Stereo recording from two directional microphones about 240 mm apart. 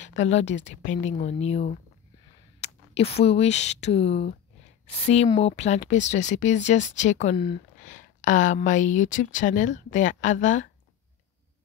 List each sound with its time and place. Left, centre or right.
0.2 s speech: left